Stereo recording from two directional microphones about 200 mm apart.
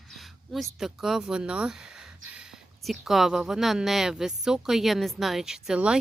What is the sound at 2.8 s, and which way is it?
Speech, centre (ahead or behind).